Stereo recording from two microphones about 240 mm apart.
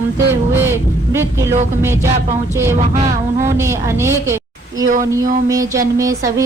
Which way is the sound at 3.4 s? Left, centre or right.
Centre.